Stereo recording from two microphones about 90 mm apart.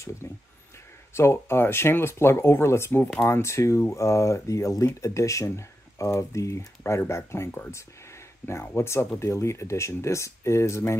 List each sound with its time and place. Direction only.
0.2 s speech: 30° left (ahead or behind)